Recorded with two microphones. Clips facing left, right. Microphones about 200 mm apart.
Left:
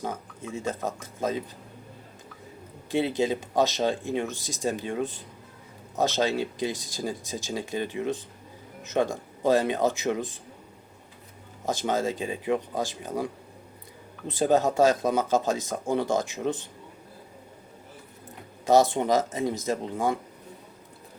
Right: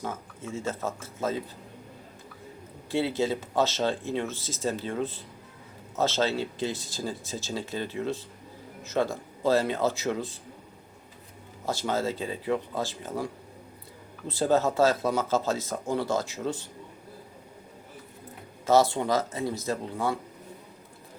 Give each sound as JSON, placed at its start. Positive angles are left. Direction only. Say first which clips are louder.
{"t": 0.1, "sound": "speech", "louder": "left 1 dB", "side_deg": 15}
{"t": 2.9, "sound": "speech", "louder": "left 2 dB", "side_deg": 15}
{"t": 11.9, "sound": "speech", "louder": "left 2 dB", "side_deg": 15}
{"t": 18.6, "sound": "speech", "louder": "left 2 dB", "side_deg": 15}